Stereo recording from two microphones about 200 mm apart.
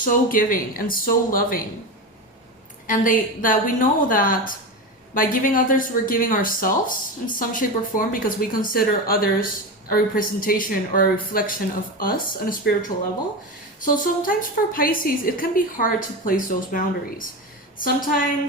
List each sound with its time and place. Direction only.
0.0 s speech: 45° left (ahead or behind)
2.8 s speech: 40° left (ahead or behind)
13.8 s speech: 45° left (ahead or behind)